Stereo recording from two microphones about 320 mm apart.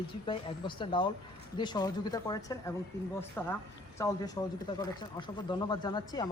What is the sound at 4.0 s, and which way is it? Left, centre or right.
Speech, centre.